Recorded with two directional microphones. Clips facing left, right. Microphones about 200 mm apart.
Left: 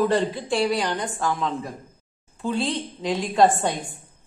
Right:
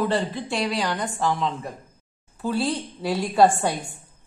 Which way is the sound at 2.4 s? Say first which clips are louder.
Right 1 dB; 10° right (ahead or behind).